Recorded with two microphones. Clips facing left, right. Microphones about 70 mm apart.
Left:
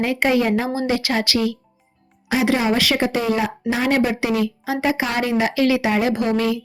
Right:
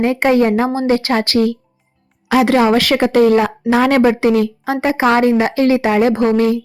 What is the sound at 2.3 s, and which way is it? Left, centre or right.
A woman's voice, right.